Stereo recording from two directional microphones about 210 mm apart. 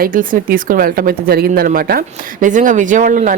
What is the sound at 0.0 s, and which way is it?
Speech, 40° right (ahead or behind).